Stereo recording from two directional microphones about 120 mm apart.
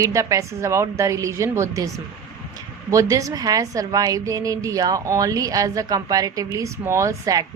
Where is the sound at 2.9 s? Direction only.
25° right (ahead or behind).